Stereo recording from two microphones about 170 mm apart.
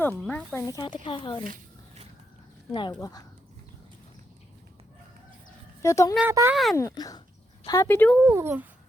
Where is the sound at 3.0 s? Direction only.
20° left (ahead or behind).